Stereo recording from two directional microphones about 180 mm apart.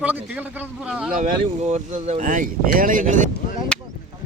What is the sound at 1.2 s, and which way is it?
Speech, 40° right (ahead or behind).